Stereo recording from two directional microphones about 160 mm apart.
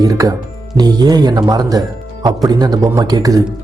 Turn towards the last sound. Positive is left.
turn(degrees=-25)  # may be behind; listen again after turning